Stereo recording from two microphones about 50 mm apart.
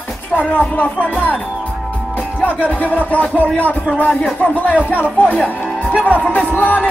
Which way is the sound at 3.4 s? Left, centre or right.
Left.